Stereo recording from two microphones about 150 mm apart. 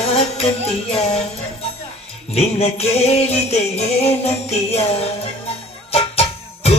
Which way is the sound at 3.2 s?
45° left (ahead or behind).